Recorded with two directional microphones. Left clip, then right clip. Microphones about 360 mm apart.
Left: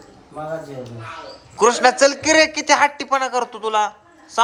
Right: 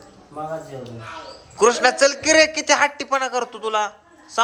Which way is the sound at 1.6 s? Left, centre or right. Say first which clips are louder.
Left 2 dB; centre.